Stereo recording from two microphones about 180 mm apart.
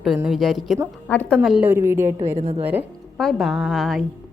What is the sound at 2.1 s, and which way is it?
Speech, 35° right (ahead or behind).